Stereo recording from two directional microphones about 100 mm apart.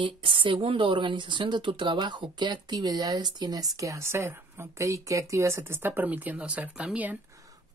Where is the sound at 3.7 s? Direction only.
30° right (ahead or behind); by 7.1 s 15° right (ahead or behind).